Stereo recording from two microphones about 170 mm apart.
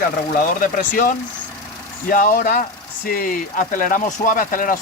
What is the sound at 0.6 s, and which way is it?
Speech, 50° left (ahead or behind).